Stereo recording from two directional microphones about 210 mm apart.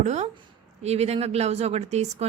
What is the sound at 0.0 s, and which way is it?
Speech, 35° right (ahead or behind).